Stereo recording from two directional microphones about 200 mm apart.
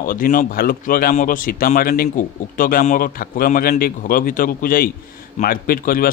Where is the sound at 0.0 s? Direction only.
45° left (ahead or behind).